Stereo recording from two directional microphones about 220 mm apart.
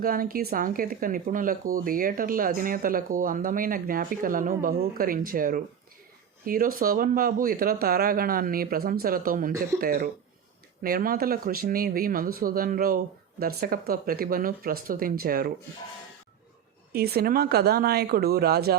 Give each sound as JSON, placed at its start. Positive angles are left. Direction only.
{"t": 0.0, "sound": "speech", "side_deg": -40}
{"t": 16.9, "sound": "speech", "side_deg": -45}